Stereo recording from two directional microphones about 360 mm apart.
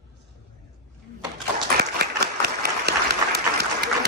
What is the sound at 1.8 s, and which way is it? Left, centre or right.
Applause, right.